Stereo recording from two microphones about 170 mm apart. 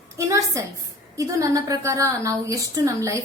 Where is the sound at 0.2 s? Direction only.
20° right (ahead or behind).